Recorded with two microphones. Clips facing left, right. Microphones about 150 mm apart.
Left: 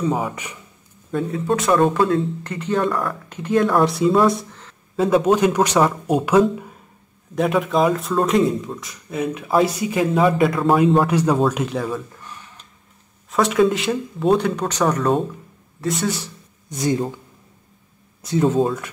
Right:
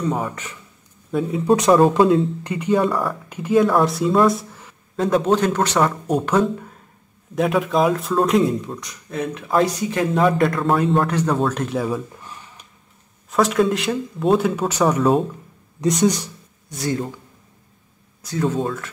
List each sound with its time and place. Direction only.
0.0 s speech: 5° left (ahead or behind); by 12.6 s 15° right (ahead or behind)
13.3 s speech: centre (ahead or behind)
16.0 s speech: 15° right (ahead or behind)
16.6 s speech: 20° left (ahead or behind)
18.2 s speech: 25° left (ahead or behind)